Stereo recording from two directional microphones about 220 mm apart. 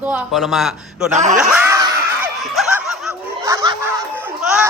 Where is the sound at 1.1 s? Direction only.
35° right (ahead or behind).